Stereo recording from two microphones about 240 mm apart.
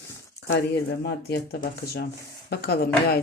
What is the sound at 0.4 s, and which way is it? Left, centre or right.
Speech, left.